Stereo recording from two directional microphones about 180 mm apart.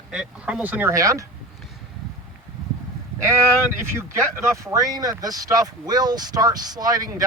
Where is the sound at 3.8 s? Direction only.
15° right (ahead or behind).